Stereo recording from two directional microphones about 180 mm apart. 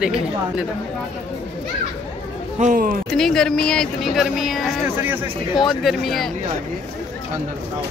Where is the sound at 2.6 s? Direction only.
45° right (ahead or behind).